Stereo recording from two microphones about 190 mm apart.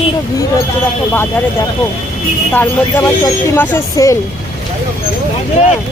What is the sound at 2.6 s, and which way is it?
Speech, 10° left (ahead or behind).